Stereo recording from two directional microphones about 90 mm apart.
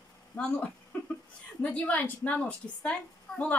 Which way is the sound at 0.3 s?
15° left (ahead or behind).